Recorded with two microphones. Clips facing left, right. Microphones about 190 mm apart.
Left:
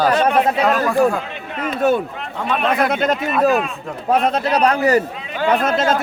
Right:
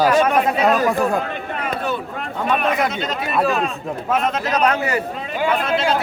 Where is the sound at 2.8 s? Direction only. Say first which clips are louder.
Left 5 dB; 55° left (ahead or behind).